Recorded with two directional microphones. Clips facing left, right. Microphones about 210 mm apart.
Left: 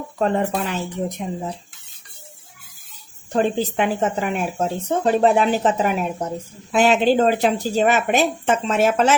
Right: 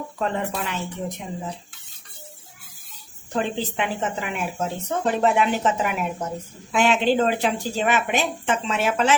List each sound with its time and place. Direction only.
0.2 s speech: 40° left (ahead or behind)
3.3 s speech: 40° left (ahead or behind)